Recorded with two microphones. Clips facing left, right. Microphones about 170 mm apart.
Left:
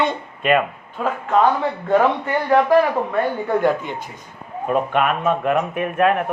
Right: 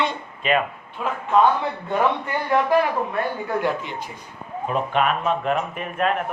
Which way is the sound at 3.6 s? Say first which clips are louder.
Left 5 dB; 50° left (ahead or behind).